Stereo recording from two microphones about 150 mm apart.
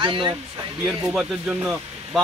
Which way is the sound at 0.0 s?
35° right (ahead or behind).